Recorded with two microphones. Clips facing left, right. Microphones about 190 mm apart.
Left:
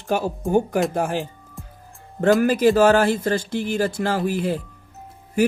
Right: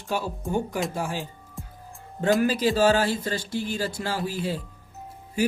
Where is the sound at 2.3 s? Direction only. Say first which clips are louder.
Left 6 dB; 50° left (ahead or behind).